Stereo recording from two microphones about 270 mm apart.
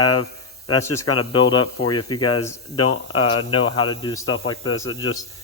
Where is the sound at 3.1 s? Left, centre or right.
Centre.